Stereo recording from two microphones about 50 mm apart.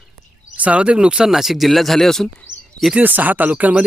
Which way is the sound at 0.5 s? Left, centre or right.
Right.